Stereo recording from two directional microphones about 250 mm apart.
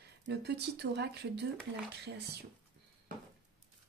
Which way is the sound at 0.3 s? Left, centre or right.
Right.